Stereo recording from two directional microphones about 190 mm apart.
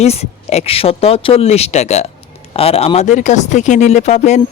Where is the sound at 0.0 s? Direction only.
35° left (ahead or behind).